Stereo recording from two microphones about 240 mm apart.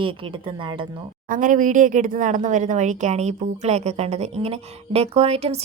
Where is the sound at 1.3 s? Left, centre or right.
Right.